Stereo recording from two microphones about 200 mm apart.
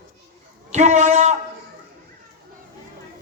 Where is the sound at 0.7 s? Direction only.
35° right (ahead or behind).